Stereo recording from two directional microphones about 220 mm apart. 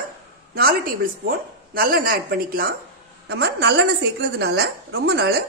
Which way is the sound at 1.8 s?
40° right (ahead or behind).